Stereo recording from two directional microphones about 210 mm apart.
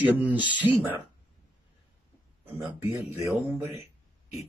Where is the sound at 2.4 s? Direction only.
10° right (ahead or behind).